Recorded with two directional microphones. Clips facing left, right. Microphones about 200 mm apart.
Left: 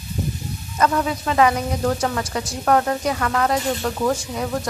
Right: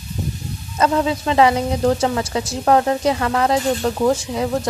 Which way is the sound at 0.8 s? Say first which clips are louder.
Right 3 dB; 25° right (ahead or behind).